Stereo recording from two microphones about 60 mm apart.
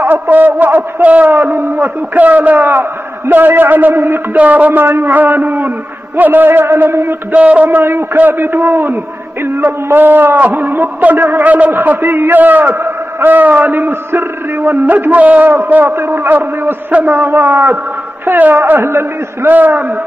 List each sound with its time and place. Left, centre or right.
0.0 s a man's voice: right
1.3 s a man's voice: right
4.4 s a man's voice: right
4.8 s a man's voice: right
7.3 s a man's voice: right
7.8 s a man's voice: right
19.5 s a man's voice: right